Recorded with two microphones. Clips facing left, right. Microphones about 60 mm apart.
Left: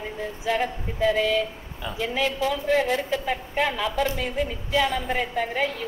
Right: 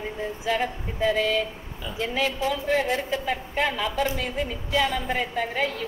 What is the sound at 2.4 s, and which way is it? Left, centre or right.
Music, right.